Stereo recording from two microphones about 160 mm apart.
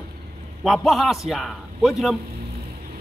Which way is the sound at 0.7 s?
Centre (ahead or behind).